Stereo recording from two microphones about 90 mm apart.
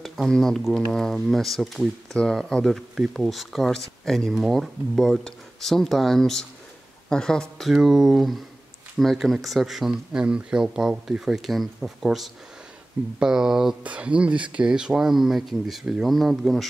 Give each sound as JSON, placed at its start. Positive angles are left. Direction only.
{"t": 0.0, "sound": "speech", "side_deg": 0}